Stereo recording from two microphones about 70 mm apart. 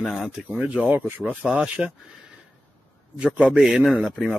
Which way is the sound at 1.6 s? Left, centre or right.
Centre.